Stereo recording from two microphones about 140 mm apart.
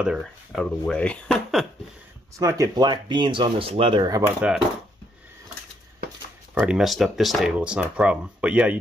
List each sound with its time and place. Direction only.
0.0 s speech: centre (ahead or behind)
2.3 s speech: 25° right (ahead or behind)
4.4 s speech: 10° right (ahead or behind)
6.6 s speech: 5° right (ahead or behind)